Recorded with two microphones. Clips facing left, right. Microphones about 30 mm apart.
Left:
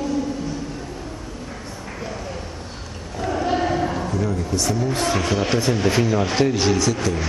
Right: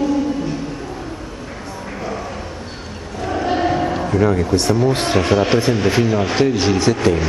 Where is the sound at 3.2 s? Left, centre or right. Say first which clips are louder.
Right 3 dB; centre.